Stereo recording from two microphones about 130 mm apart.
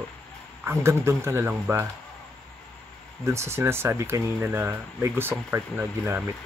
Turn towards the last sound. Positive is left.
turn(degrees=-15)  # may be behind; listen again after turning